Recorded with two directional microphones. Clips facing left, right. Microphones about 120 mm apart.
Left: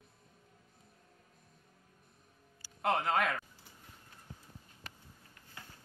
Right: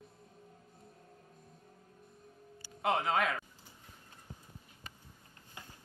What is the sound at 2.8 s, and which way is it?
Speech, centre (ahead or behind).